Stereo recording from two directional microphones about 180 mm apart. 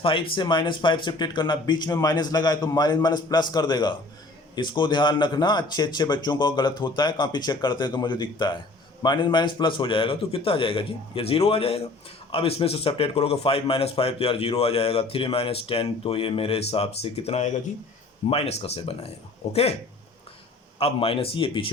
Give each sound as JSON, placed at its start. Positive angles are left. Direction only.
{"t": 0.0, "sound": "speech", "side_deg": 30}
{"t": 20.7, "sound": "speech", "side_deg": 30}